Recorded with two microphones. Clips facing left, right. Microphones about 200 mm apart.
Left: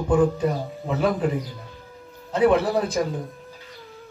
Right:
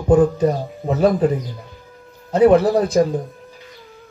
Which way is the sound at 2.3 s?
40° right (ahead or behind).